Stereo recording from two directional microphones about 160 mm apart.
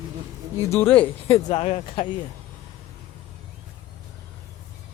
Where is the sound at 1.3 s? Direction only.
40° left (ahead or behind).